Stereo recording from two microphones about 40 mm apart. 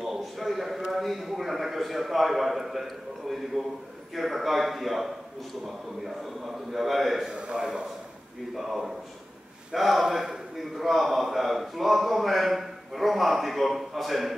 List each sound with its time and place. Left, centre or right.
0.0 s a sound: centre
0.9 s a man's voice: centre
7.2 s a man's voice: centre